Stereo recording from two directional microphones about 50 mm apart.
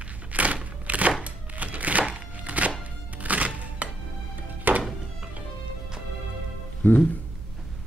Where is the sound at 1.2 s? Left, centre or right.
Right.